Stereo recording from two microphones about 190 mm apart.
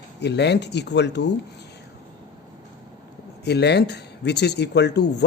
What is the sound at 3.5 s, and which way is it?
A man's voice, 60° left (ahead or behind).